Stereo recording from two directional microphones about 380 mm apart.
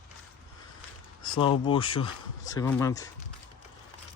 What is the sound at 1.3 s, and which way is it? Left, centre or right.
Speech, centre.